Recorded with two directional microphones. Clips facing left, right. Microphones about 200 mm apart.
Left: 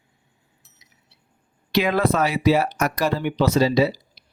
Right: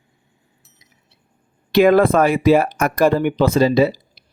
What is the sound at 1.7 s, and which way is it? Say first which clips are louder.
Speech: right 8 dB; 50° right (ahead or behind).